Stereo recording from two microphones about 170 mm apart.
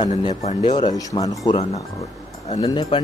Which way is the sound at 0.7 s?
25° left (ahead or behind).